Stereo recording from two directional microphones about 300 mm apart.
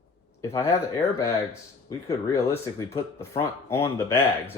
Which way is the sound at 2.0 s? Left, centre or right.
Centre.